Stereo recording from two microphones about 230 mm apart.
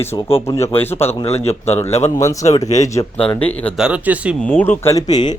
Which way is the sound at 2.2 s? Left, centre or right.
Centre.